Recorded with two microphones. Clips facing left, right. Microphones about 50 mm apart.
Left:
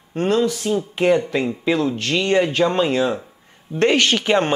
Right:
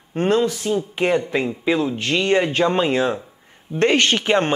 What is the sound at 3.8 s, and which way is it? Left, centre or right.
Speech, right.